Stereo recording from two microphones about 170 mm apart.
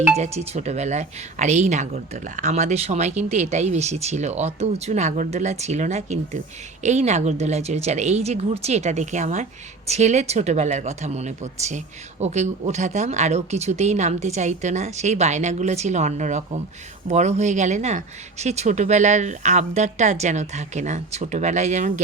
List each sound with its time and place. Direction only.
0.2 s speech: 40° right (ahead or behind)